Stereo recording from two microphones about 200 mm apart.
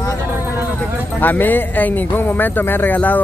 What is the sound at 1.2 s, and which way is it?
A man's voice, 10° left (ahead or behind).